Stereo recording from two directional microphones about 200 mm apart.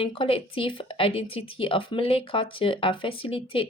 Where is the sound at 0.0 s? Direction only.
25° left (ahead or behind).